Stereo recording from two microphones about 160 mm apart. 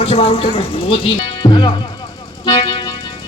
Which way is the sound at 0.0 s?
40° left (ahead or behind).